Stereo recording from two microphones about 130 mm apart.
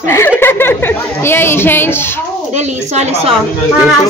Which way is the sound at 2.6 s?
60° right (ahead or behind).